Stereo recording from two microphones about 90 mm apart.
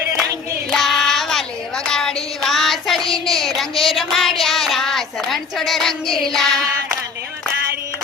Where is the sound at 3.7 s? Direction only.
90° left.